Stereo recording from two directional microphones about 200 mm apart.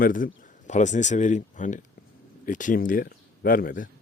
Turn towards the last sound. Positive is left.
turn(degrees=45)  # may be behind; listen again after turning